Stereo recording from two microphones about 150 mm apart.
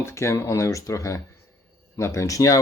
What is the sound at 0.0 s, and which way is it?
Speech, 20° left (ahead or behind).